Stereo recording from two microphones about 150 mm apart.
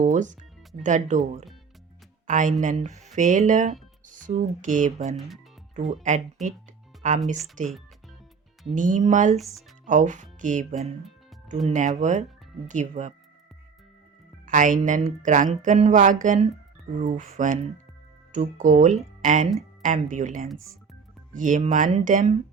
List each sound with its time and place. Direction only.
0.0 s speech: 55° right (ahead or behind)
14.4 s speech: 60° right (ahead or behind)